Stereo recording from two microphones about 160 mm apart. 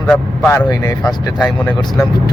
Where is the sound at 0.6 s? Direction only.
25° left (ahead or behind).